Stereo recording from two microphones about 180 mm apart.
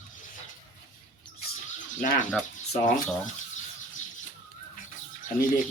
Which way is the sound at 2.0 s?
45° left (ahead or behind).